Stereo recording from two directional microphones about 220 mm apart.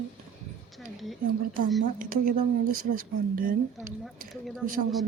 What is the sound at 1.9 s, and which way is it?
Speech, 40° right (ahead or behind).